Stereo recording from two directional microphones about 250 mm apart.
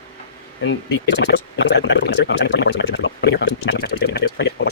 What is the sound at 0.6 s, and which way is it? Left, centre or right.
Speech, left.